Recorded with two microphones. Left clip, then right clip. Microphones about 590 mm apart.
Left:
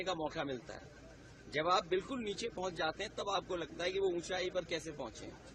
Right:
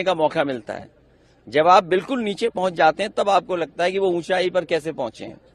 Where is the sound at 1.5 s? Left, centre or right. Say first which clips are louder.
Right 18 dB; right.